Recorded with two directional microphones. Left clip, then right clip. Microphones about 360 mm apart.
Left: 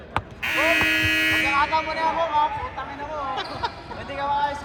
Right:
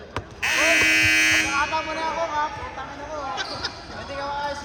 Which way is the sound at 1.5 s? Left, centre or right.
Left.